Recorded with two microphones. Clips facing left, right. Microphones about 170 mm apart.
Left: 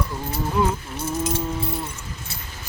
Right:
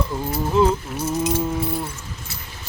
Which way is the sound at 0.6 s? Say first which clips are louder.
Right 5 dB; 25° right (ahead or behind).